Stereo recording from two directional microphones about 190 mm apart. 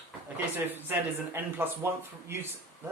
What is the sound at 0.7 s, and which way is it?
Speech, 10° right (ahead or behind).